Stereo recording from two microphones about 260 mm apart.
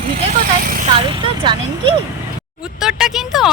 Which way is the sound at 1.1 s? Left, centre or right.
Centre.